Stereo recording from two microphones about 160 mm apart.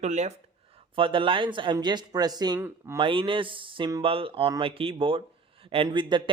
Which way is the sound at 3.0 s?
35° right (ahead or behind).